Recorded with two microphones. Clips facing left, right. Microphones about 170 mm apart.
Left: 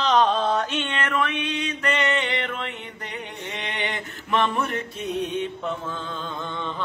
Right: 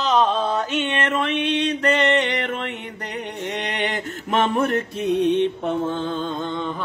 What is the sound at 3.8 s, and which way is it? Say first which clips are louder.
Mantra: right 5 dB; 45° right (ahead or behind).